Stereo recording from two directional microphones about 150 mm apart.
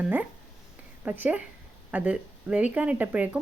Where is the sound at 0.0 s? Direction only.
10° right (ahead or behind).